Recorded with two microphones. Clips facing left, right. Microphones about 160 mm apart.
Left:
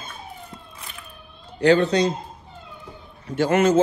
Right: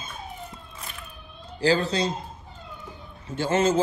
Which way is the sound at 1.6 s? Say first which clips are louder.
Left 6 dB; 30° right (ahead or behind).